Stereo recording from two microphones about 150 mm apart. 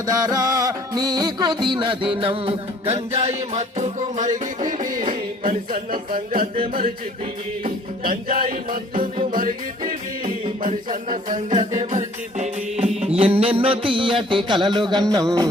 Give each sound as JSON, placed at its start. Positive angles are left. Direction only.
{"t": 0.1, "sound": "music", "side_deg": -25}
{"t": 11.6, "sound": "music", "side_deg": -30}
{"t": 11.9, "sound": "music", "side_deg": -50}